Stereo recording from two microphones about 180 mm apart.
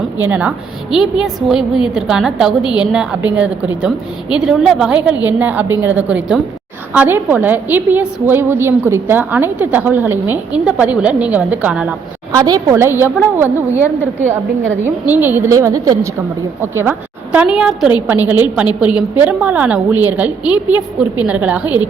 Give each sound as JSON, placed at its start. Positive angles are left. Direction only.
{"t": 0.2, "sound": "a woman's voice", "side_deg": -10}
{"t": 12.3, "sound": "a woman's voice", "side_deg": -20}